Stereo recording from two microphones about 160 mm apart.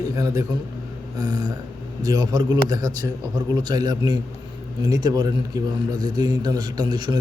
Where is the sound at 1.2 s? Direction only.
25° right (ahead or behind).